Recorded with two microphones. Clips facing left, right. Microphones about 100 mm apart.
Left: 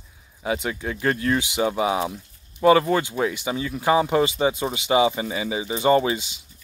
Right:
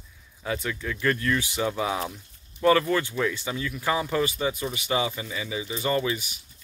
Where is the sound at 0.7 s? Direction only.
40° left (ahead or behind).